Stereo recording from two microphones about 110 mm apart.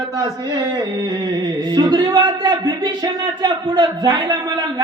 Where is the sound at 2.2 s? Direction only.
50° right (ahead or behind).